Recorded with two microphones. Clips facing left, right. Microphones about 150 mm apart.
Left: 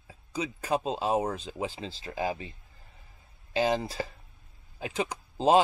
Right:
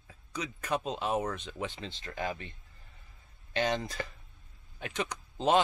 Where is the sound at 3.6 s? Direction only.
35° left (ahead or behind).